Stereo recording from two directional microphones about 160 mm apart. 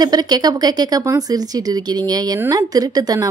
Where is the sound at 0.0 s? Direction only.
25° right (ahead or behind).